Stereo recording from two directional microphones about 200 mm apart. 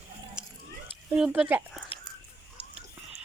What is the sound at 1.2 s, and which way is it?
Speech, 5° right (ahead or behind).